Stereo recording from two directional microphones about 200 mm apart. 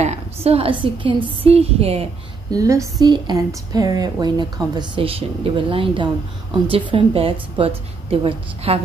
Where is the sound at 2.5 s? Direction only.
15° right (ahead or behind).